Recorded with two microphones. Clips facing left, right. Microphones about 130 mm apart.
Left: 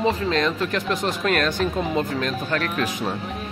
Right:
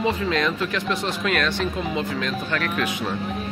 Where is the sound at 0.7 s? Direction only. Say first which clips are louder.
Left 1 dB; 45° left (ahead or behind).